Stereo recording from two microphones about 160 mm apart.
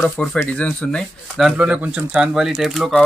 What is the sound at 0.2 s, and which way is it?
Speech, 5° left (ahead or behind).